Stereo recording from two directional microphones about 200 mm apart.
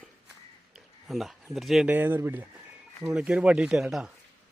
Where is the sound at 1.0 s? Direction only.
Centre (ahead or behind).